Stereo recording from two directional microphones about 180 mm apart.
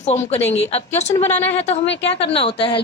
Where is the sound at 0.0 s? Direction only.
40° left (ahead or behind).